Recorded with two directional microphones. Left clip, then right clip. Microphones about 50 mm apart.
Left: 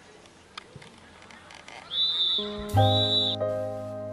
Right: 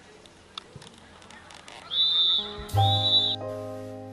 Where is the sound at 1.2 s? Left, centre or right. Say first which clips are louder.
Even; right.